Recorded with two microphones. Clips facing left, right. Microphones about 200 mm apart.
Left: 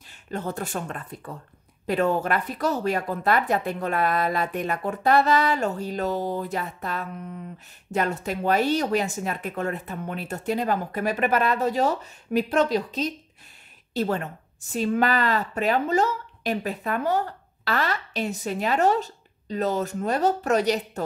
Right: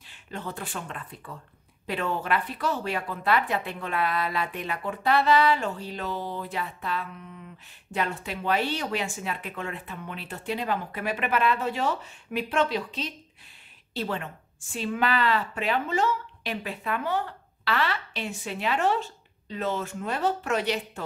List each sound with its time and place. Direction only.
0.1 s a woman's voice: 45° left (ahead or behind)